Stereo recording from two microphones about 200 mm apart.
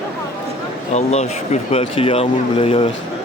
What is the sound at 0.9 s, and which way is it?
Speech, 35° left (ahead or behind).